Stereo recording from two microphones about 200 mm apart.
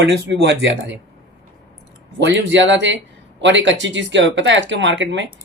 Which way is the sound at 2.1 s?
60° right (ahead or behind).